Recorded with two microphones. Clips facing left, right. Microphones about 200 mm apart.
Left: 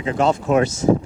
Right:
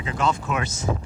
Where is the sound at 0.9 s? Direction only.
35° left (ahead or behind).